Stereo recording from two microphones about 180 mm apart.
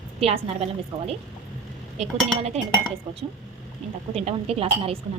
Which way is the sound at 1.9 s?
35° right (ahead or behind).